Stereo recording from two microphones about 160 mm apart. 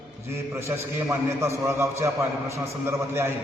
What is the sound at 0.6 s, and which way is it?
A man's voice, 15° right (ahead or behind).